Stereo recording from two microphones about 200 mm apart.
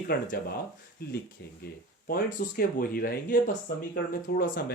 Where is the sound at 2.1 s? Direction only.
45° left (ahead or behind).